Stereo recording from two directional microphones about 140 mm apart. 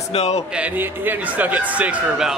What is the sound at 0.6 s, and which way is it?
A man's voice, 10° right (ahead or behind).